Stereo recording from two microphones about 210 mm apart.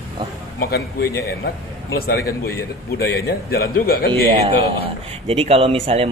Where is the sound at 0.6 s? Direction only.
50° left (ahead or behind).